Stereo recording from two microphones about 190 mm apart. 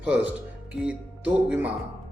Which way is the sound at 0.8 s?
5° right (ahead or behind).